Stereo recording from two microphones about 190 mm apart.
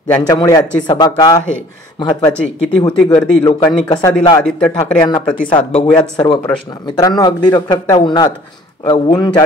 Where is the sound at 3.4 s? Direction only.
20° left (ahead or behind).